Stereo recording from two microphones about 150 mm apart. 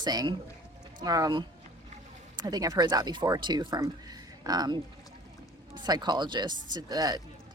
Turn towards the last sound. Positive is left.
turn(degrees=-25)  # may be behind; listen again after turning